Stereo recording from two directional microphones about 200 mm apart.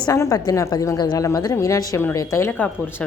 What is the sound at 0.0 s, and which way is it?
A woman's voice, 15° left (ahead or behind).